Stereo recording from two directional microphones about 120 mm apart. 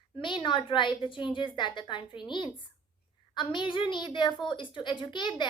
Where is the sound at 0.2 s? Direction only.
40° left (ahead or behind).